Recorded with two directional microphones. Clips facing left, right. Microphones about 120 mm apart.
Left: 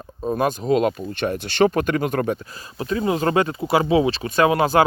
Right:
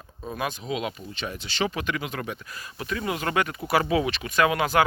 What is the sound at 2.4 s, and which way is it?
Speech, 30° left (ahead or behind).